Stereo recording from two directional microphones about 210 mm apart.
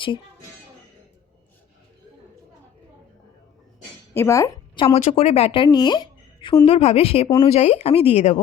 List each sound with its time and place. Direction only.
4.1 s a woman's voice: 15° left (ahead or behind)
4.9 s a woman's voice: 30° left (ahead or behind)